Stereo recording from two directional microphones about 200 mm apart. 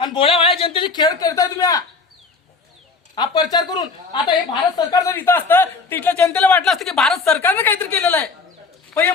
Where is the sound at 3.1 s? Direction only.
20° left (ahead or behind).